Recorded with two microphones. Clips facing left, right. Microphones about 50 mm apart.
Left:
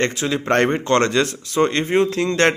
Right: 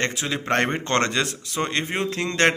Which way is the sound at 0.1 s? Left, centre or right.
Centre.